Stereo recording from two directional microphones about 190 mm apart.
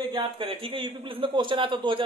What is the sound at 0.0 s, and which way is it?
Speech, 25° right (ahead or behind).